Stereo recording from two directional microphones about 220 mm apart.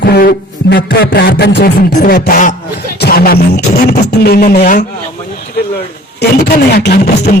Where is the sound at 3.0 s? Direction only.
45° left (ahead or behind).